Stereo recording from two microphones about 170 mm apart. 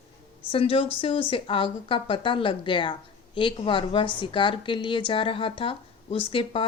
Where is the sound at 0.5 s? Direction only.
35° left (ahead or behind).